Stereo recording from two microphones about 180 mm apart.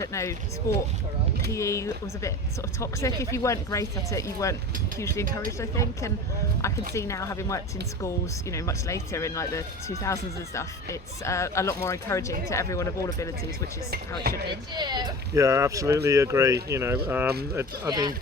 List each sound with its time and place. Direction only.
0.0 s speech: 15° left (ahead or behind)
1.5 s speech: 15° left (ahead or behind)
14.8 s speech: 25° right (ahead or behind)